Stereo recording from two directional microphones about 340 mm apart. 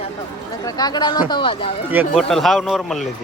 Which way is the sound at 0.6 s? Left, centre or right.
Centre.